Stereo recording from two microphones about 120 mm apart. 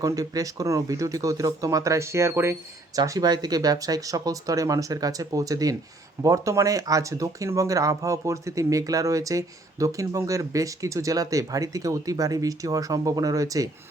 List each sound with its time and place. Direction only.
0.0 s speech: 30° right (ahead or behind)
3.0 s speech: 35° right (ahead or behind)